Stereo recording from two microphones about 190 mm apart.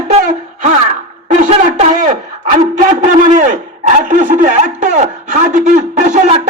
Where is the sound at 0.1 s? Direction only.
40° right (ahead or behind).